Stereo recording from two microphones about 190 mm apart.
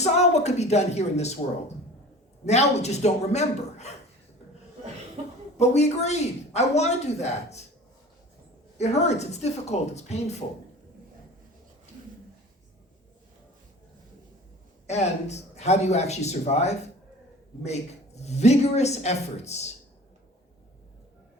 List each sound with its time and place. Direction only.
0.0 s speech: 35° left (ahead or behind)
2.5 s speech: 35° left (ahead or behind)
5.5 s speech: 35° left (ahead or behind)
8.8 s speech: 35° left (ahead or behind)
14.8 s speech: 35° left (ahead or behind)